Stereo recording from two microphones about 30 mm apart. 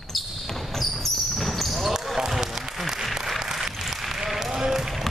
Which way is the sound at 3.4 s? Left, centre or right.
Centre.